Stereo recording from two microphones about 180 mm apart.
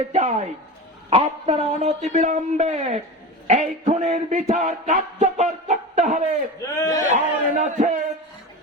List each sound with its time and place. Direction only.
0.1 s a man's voice: 35° right (ahead or behind)
3.4 s music: 40° right (ahead or behind)
6.9 s speech: 45° right (ahead or behind)